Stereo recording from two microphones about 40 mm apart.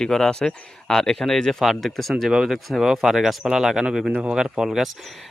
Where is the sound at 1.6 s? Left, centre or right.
Centre.